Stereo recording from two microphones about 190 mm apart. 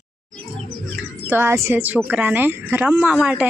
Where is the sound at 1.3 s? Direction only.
10° right (ahead or behind).